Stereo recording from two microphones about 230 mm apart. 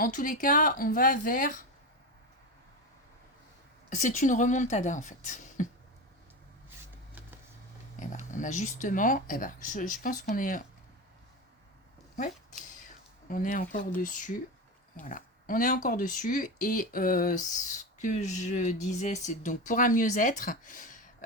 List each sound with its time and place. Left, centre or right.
0.0 s speech: left
3.8 s speech: left
7.9 s speech: left
13.2 s speech: left